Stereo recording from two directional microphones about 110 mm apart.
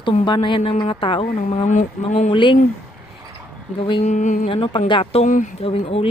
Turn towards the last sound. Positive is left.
turn(degrees=65)  # may be behind; listen again after turning